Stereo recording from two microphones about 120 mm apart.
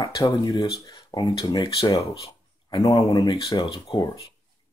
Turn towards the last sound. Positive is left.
turn(degrees=35)  # may be behind; listen again after turning